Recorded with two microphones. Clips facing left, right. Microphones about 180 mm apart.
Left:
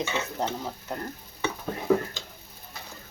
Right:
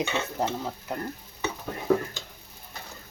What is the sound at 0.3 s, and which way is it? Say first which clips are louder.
Speech: right 1 dB; 5° right (ahead or behind).